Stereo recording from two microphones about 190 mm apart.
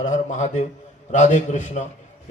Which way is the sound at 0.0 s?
40° left (ahead or behind).